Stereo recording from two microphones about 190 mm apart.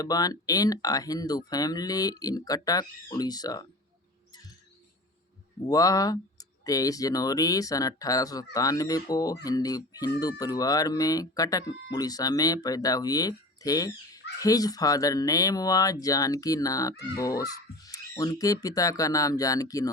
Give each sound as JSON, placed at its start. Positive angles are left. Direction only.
{"t": 0.0, "sound": "speech", "side_deg": 20}
{"t": 5.6, "sound": "speech", "side_deg": 20}